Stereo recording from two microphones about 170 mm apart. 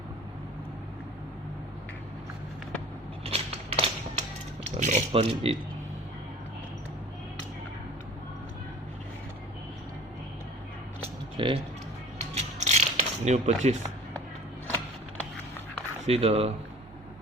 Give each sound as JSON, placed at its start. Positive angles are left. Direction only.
{"t": 3.2, "sound": "a sound", "side_deg": -35}
{"t": 4.8, "sound": "speech", "side_deg": -45}
{"t": 11.3, "sound": "music", "side_deg": -30}
{"t": 12.3, "sound": "music", "side_deg": -40}
{"t": 16.0, "sound": "speech", "side_deg": -35}